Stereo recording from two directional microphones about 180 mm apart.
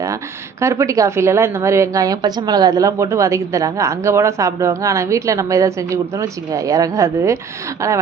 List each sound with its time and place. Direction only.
0.6 s a woman's voice: 15° right (ahead or behind)